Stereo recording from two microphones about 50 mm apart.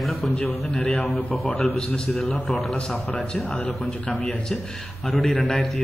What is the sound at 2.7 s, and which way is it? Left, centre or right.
Speech, centre.